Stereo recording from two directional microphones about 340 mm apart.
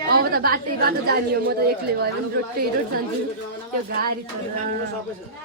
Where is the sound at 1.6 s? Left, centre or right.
Right.